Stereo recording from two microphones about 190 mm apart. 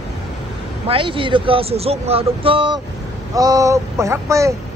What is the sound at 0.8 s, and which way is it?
Speech, 30° right (ahead or behind).